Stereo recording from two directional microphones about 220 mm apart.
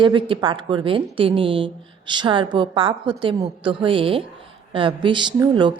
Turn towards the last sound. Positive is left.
turn(degrees=-20)  # may be behind; listen again after turning